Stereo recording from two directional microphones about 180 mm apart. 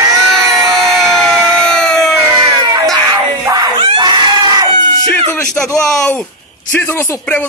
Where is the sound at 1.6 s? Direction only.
5° left (ahead or behind).